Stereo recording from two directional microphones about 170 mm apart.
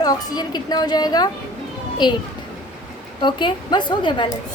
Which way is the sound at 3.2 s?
25° left (ahead or behind).